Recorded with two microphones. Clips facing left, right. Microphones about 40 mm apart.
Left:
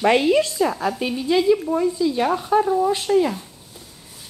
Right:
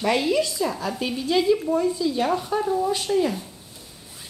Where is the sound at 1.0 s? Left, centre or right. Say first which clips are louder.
Left 2 dB; centre.